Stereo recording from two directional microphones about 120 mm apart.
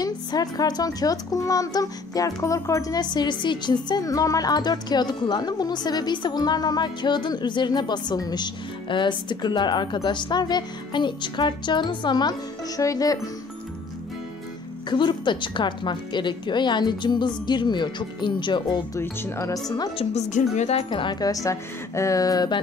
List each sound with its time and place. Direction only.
0.0 s speech: 30° left (ahead or behind)
14.9 s speech: 40° left (ahead or behind)
18.9 s speech: 25° left (ahead or behind)
20.0 s speech: 75° left (ahead or behind); by 22.6 s 30° left (ahead or behind)